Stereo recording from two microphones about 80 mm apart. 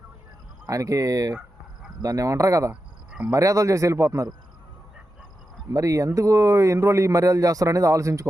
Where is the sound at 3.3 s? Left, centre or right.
Right.